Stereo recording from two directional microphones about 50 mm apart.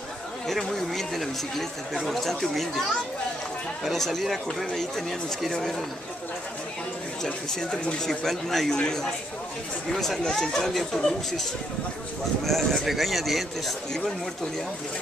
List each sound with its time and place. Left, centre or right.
0.5 s speech: centre
3.8 s speech: centre
7.2 s speech: left
8.0 s speech: centre
12.4 s speech: centre